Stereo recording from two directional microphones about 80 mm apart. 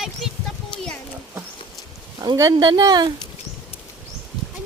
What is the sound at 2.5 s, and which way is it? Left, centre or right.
Speech, right.